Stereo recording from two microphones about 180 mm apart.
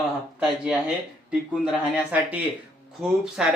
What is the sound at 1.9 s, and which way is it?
Speech, 10° right (ahead or behind).